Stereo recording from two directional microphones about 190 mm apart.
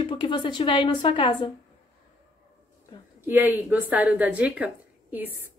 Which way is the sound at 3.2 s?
10° right (ahead or behind).